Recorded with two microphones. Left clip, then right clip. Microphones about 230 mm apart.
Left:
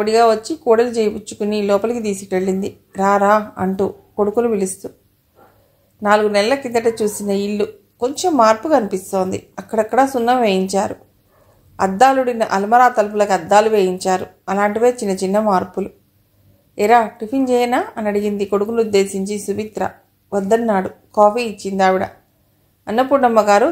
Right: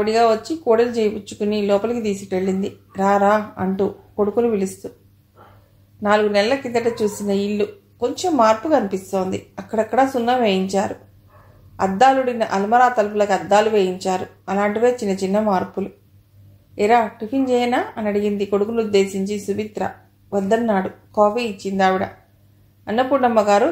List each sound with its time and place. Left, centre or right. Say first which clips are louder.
0.0 s speech: left 3 dB; left
6.0 s speech: left 3 dB; left